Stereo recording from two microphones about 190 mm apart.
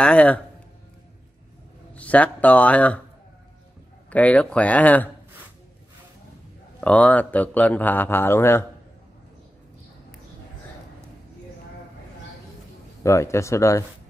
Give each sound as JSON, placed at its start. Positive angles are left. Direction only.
{"t": 0.0, "sound": "speech", "side_deg": 5}
{"t": 2.0, "sound": "speech", "side_deg": 5}
{"t": 4.1, "sound": "speech", "side_deg": 5}
{"t": 6.8, "sound": "speech", "side_deg": 10}
{"t": 13.0, "sound": "speech", "side_deg": 15}